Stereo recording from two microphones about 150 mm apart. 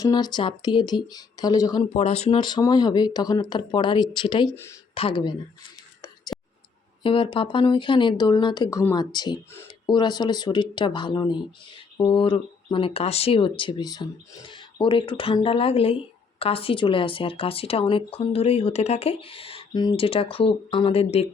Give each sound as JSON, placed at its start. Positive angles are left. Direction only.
{"t": 0.0, "sound": "speech", "side_deg": 25}
{"t": 1.9, "sound": "speech", "side_deg": 45}
{"t": 4.5, "sound": "speech", "side_deg": 15}
{"t": 4.9, "sound": "speech", "side_deg": 35}
{"t": 7.0, "sound": "speech", "side_deg": 35}